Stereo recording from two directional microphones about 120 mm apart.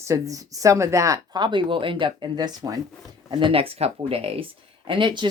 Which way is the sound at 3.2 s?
45° right (ahead or behind).